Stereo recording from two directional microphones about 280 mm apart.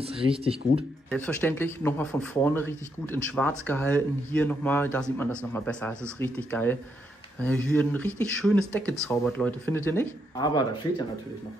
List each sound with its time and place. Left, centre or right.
0.0 s speech: right
1.1 s speech: centre